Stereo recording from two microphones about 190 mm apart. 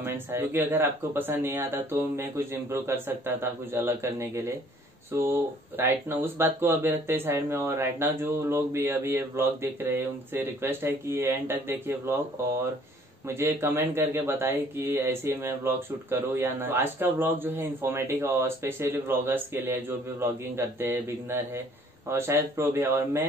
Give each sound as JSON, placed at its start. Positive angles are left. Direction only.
{"t": 0.0, "sound": "speech", "side_deg": -10}
{"t": 13.3, "sound": "speech", "side_deg": -15}